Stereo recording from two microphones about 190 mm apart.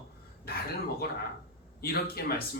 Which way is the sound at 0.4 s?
55° left (ahead or behind).